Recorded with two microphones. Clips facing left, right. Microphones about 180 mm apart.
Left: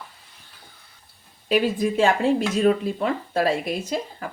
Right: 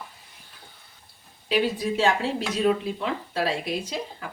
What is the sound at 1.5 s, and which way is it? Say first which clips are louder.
Speech: left 3 dB; 50° left (ahead or behind).